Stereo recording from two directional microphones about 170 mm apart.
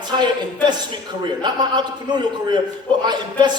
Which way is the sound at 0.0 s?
25° right (ahead or behind).